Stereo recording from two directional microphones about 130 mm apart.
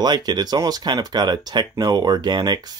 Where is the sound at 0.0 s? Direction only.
35° right (ahead or behind).